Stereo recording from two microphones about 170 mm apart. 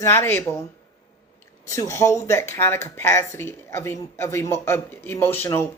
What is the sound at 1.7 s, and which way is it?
Speech, 15° left (ahead or behind).